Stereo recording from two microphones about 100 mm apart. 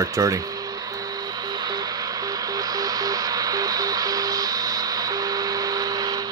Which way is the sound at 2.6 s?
40° right (ahead or behind).